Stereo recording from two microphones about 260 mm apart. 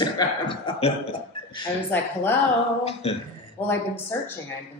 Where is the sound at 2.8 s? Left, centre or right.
Left.